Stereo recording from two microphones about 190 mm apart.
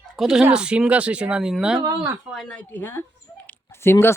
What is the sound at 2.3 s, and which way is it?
Speech, centre (ahead or behind).